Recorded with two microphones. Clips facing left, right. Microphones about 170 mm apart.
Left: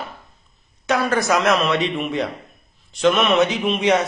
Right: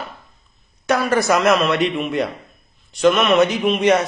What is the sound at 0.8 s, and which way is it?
A man's voice, centre (ahead or behind).